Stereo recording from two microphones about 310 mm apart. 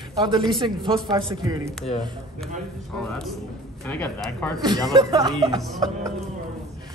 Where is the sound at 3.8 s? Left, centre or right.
Centre.